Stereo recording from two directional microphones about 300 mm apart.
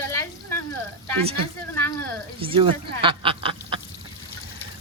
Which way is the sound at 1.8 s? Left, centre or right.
Centre.